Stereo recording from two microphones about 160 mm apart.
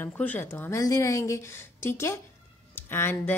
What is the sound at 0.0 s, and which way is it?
Speech, 10° left (ahead or behind).